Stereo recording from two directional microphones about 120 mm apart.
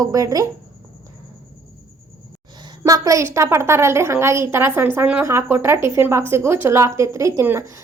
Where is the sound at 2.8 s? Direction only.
30° right (ahead or behind).